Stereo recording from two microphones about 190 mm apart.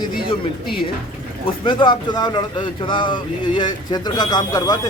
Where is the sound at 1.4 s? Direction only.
25° left (ahead or behind).